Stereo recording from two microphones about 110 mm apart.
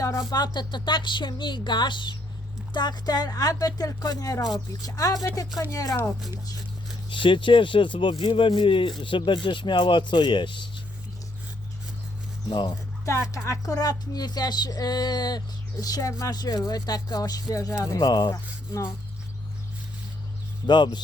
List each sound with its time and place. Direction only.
0.0 s speech: 35° left (ahead or behind)
7.1 s speech: 50° left (ahead or behind)
12.5 s speech: 40° left (ahead or behind)
13.1 s speech: 25° left (ahead or behind)
20.7 s speech: 45° left (ahead or behind)